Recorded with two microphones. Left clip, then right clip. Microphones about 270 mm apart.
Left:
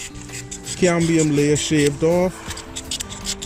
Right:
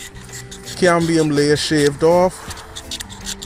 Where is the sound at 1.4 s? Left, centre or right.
Right.